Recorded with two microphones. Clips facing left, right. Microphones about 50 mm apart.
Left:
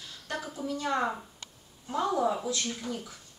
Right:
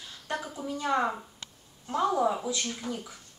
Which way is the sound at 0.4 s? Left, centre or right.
Centre.